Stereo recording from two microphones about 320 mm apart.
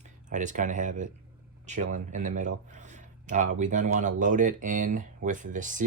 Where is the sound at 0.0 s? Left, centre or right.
Right.